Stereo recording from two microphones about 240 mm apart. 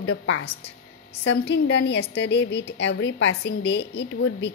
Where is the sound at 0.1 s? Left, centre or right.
Left.